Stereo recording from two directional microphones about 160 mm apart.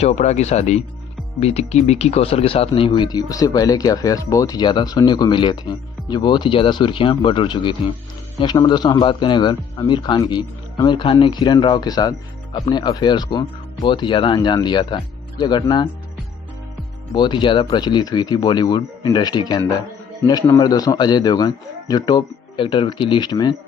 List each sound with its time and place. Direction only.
0.0 s a man's voice: 45° left (ahead or behind); by 15.6 s 25° left (ahead or behind)
17.1 s a man's voice: 30° left (ahead or behind)